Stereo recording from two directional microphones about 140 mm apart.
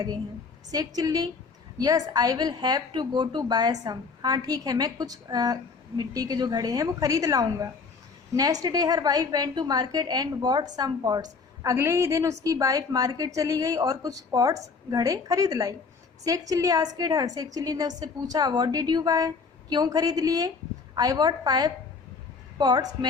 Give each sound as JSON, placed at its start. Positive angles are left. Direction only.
{"t": 0.7, "sound": "a woman's voice", "side_deg": -25}